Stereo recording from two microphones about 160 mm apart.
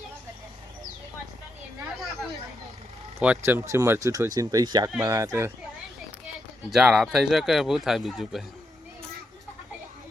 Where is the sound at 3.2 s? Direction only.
10° right (ahead or behind).